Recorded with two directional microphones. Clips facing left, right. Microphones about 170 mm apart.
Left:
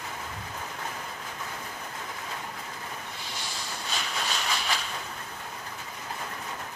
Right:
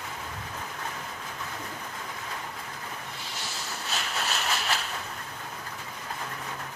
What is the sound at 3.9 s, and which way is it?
Steam, 5° right (ahead or behind).